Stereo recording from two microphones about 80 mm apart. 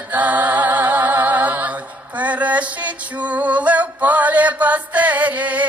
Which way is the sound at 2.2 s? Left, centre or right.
Centre.